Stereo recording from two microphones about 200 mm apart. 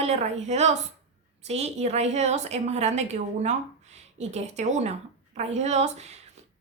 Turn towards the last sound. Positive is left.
turn(degrees=-35)  # may be behind; listen again after turning